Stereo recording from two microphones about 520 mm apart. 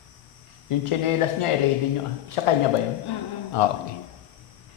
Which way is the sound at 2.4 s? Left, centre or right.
Left.